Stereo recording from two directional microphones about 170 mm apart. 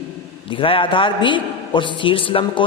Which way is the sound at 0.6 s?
30° left (ahead or behind).